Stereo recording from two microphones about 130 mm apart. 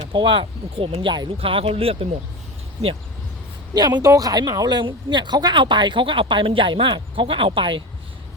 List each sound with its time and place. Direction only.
0.0 s speech: 40° right (ahead or behind)
3.8 s speech: 30° right (ahead or behind)